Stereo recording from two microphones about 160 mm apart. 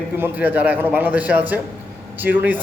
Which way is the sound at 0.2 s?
10° right (ahead or behind).